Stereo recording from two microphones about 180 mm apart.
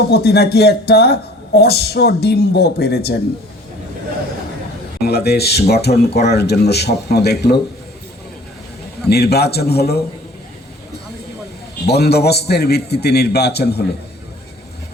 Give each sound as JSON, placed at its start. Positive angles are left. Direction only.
{"t": 0.1, "sound": "speech", "side_deg": 65}
{"t": 5.0, "sound": "speech", "side_deg": 60}
{"t": 9.0, "sound": "speech", "side_deg": 60}
{"t": 11.9, "sound": "speech", "side_deg": 65}